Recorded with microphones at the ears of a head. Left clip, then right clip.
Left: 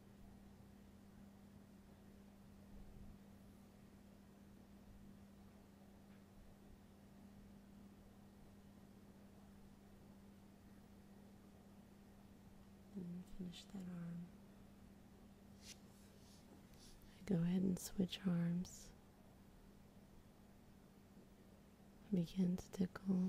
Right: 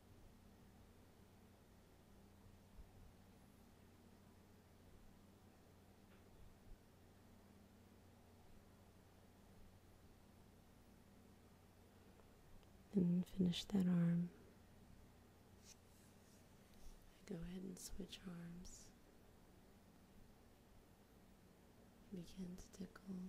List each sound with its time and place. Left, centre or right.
12.9 s a woman's voice: right
17.2 s speech: left
22.1 s speech: left